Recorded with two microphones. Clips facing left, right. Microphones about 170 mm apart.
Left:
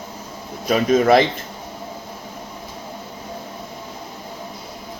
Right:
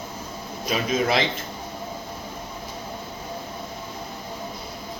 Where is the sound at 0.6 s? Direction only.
50° left (ahead or behind).